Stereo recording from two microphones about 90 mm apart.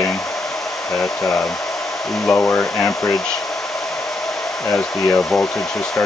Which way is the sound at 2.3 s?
15° left (ahead or behind).